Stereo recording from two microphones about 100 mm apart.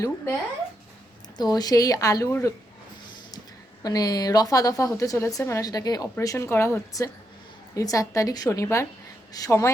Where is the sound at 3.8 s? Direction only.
40° left (ahead or behind).